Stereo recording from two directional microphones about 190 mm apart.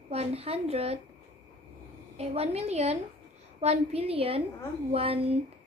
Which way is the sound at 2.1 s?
35° right (ahead or behind).